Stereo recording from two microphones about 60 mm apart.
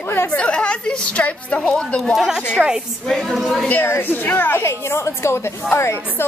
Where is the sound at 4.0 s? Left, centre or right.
Left.